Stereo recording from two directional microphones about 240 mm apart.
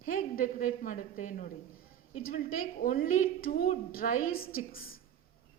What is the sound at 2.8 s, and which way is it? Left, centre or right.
A woman's voice, left.